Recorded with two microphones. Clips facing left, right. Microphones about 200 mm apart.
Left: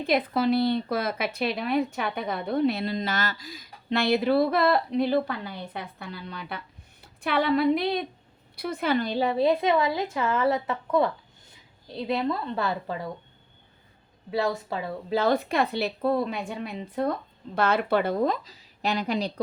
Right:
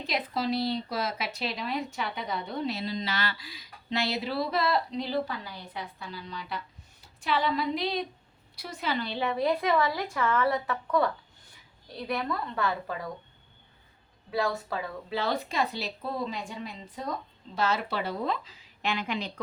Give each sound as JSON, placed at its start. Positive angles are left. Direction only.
{"t": 0.0, "sound": "a woman's voice", "side_deg": 55}
{"t": 14.3, "sound": "a woman's voice", "side_deg": 25}
{"t": 15.1, "sound": "a woman's voice", "side_deg": 50}